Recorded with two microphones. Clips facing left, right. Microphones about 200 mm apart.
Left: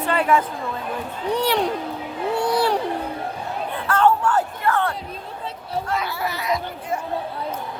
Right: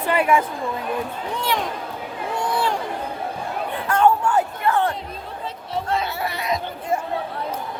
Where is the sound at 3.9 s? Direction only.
10° right (ahead or behind).